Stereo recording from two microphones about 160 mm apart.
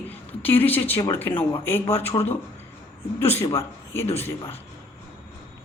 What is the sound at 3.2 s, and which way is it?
Speech, 40° left (ahead or behind).